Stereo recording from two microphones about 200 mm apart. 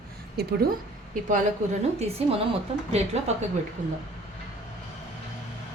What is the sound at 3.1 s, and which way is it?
Speech, 35° right (ahead or behind).